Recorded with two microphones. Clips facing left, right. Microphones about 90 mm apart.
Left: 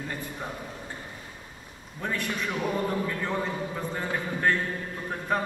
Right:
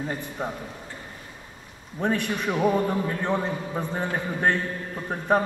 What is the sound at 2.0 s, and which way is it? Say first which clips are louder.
A man's voice: right 5 dB; 20° right (ahead or behind).